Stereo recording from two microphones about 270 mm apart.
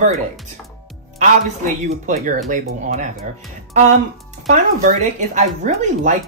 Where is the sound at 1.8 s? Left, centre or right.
Right.